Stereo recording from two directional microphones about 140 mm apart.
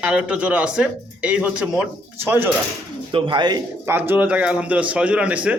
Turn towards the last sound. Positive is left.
turn(degrees=-10)  # may be behind; listen again after turning